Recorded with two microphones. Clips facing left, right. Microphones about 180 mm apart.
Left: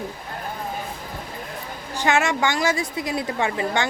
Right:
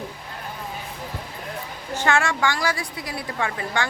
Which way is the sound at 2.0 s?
20° left (ahead or behind).